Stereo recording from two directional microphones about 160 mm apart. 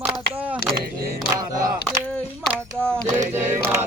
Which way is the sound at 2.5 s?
5° left (ahead or behind).